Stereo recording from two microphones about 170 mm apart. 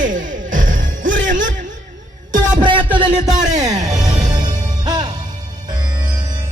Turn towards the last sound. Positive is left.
turn(degrees=-25)  # may be behind; listen again after turning